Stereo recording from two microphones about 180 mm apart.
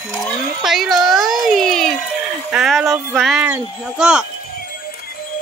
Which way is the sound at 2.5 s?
Centre (ahead or behind).